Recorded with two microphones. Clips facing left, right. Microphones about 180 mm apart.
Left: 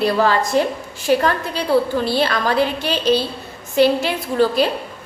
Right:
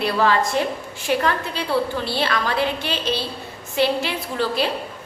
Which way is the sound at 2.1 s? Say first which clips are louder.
Left 4 dB; 40° left (ahead or behind).